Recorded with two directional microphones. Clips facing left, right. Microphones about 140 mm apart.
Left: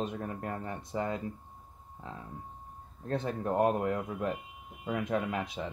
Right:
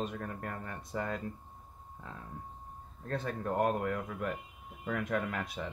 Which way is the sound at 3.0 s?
25° left (ahead or behind).